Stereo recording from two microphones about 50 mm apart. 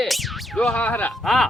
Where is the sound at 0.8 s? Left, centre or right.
Left.